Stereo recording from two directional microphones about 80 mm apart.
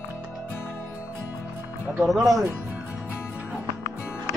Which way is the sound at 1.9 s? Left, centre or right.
Centre.